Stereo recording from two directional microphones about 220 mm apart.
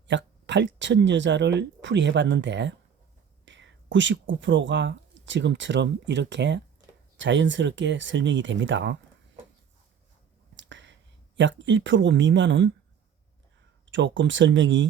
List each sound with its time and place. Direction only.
0.1 s speech: 55° right (ahead or behind)
10.6 s finger snapping: 55° right (ahead or behind)
11.3 s speech: 55° right (ahead or behind)
13.9 s speech: 55° right (ahead or behind)